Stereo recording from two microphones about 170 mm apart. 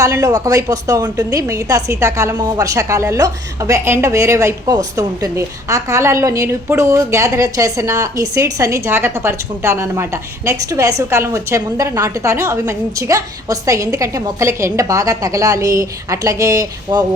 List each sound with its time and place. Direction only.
0.0 s a woman's voice: 20° right (ahead or behind)